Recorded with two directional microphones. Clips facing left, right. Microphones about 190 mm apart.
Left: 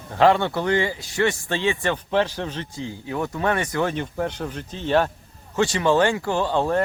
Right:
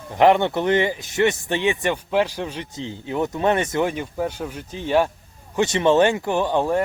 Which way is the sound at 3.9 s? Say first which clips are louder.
Even; 5° right (ahead or behind).